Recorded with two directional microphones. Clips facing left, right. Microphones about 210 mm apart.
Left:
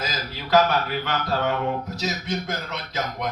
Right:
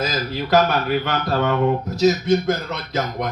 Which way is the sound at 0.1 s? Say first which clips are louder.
Right 3 dB; 50° right (ahead or behind).